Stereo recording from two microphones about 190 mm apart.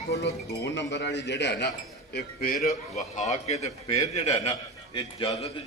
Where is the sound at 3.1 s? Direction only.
35° left (ahead or behind).